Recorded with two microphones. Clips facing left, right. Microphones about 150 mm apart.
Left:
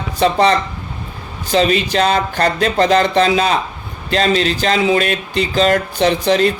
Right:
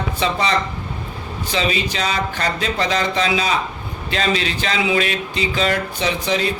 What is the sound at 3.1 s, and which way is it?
Speech, 50° left (ahead or behind).